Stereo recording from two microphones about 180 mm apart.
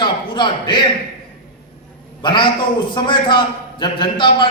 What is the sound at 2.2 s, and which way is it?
A man's voice, 25° left (ahead or behind).